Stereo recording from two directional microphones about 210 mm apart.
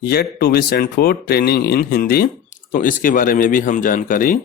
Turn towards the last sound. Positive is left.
turn(degrees=40)  # may be behind; listen again after turning